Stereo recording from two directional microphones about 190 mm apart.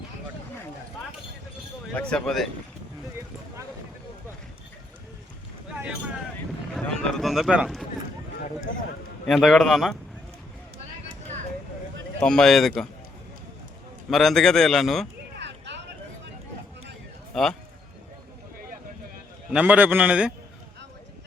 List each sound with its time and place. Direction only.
1.9 s speech: 5° left (ahead or behind)
6.7 s speech: centre (ahead or behind)
9.2 s speech: centre (ahead or behind)
12.2 s speech: 5° left (ahead or behind)
14.1 s speech: centre (ahead or behind)
15.4 s a sound: 65° right (ahead or behind)
17.3 s speech: centre (ahead or behind)
19.5 s speech: 5° right (ahead or behind)